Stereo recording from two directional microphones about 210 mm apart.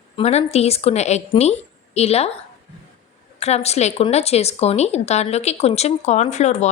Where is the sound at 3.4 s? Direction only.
30° left (ahead or behind).